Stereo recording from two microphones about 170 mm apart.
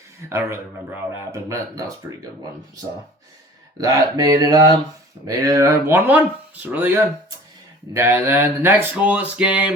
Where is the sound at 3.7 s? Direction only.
20° right (ahead or behind).